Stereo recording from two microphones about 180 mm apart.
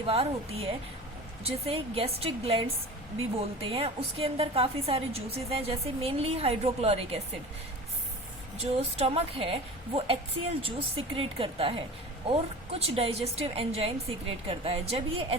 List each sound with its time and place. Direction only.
0.1 s a woman's voice: 35° right (ahead or behind)
8.5 s a woman's voice: 35° right (ahead or behind)